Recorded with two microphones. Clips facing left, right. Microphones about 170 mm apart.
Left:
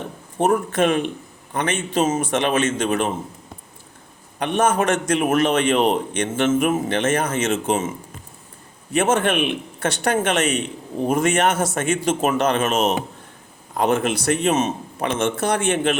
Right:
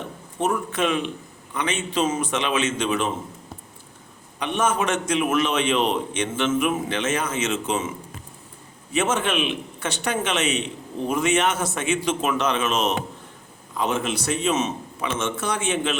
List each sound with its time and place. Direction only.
0.3 s a man's voice: 50° left (ahead or behind)
4.4 s a man's voice: 55° left (ahead or behind)